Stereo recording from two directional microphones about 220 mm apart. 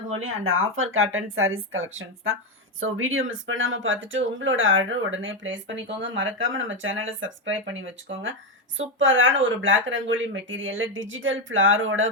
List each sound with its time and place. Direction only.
0.1 s speech: 65° right (ahead or behind)